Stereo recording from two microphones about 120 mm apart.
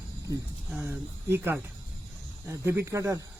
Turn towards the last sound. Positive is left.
turn(degrees=-25)  # may be behind; listen again after turning